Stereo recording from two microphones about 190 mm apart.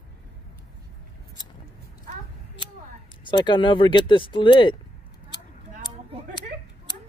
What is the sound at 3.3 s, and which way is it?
Speech, 25° left (ahead or behind).